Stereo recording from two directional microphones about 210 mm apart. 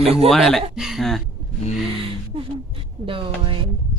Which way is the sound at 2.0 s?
25° right (ahead or behind).